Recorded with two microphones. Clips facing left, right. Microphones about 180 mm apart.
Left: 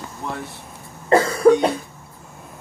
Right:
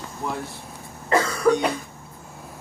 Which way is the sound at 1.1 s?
30° left (ahead or behind).